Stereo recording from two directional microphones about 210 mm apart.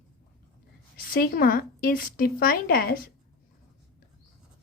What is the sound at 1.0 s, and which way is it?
A woman's voice, 45° left (ahead or behind).